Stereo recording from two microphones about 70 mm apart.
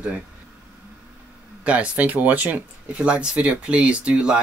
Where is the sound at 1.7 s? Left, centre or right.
Right.